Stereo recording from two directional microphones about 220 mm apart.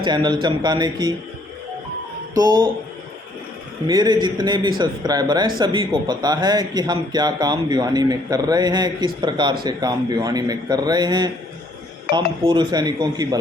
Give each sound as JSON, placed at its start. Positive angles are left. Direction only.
{"t": 0.0, "sound": "speech", "side_deg": -20}
{"t": 2.3, "sound": "speech", "side_deg": -20}
{"t": 3.8, "sound": "speech", "side_deg": -20}